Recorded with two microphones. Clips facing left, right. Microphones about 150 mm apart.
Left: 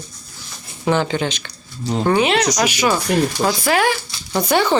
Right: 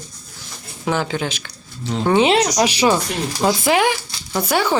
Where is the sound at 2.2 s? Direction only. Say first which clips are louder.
Right 2 dB; 25° right (ahead or behind).